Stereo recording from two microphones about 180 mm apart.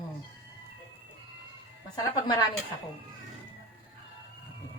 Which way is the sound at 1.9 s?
20° left (ahead or behind).